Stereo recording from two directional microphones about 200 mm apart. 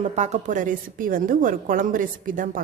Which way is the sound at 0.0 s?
35° right (ahead or behind).